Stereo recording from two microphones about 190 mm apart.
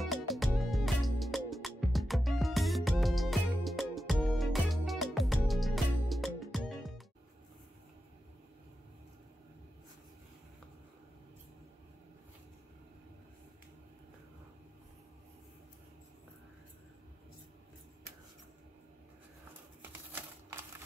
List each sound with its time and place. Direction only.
0.0 s music: centre (ahead or behind)
20.1 s crumpling: 10° right (ahead or behind)